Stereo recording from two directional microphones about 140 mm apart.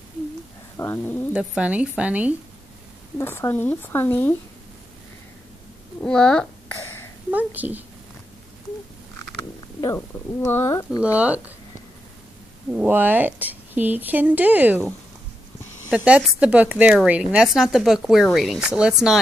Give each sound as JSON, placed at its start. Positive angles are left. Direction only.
{"t": 0.7, "sound": "speech", "side_deg": 15}
{"t": 1.4, "sound": "speech", "side_deg": -5}
{"t": 3.2, "sound": "speech", "side_deg": 15}
{"t": 6.0, "sound": "speech", "side_deg": 5}
{"t": 7.2, "sound": "speech", "side_deg": -10}
{"t": 9.8, "sound": "speech", "side_deg": 20}
{"t": 11.1, "sound": "speech", "side_deg": -10}
{"t": 12.7, "sound": "speech", "side_deg": -15}
{"t": 15.9, "sound": "speech", "side_deg": -5}